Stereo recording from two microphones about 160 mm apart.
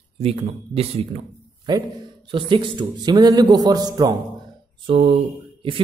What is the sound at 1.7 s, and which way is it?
A man's voice, 25° right (ahead or behind).